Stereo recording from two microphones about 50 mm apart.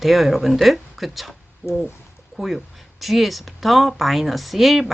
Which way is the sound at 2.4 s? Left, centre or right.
Centre.